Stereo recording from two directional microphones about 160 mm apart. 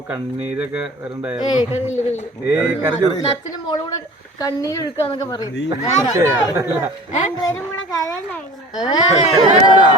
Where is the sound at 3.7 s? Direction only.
25° left (ahead or behind).